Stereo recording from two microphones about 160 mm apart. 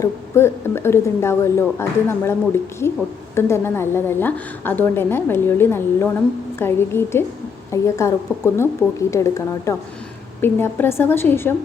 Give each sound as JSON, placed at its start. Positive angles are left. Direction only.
{"t": 0.0, "sound": "a woman's voice", "side_deg": 15}
{"t": 3.3, "sound": "a woman's voice", "side_deg": 15}